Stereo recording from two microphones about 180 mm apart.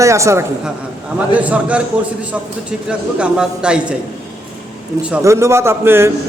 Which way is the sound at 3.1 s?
5° right (ahead or behind).